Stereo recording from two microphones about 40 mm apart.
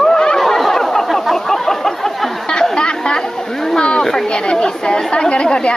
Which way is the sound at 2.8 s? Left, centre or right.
Left.